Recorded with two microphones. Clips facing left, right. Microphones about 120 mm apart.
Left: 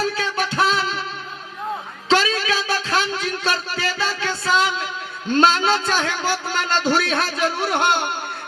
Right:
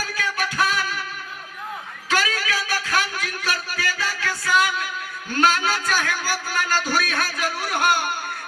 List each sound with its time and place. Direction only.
0.0 s music: 25° left (ahead or behind)
2.0 s a sound: 25° left (ahead or behind)
5.3 s a man's voice: 25° left (ahead or behind)